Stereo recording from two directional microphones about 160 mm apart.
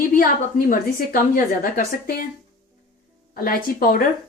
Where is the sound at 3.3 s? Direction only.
65° left (ahead or behind).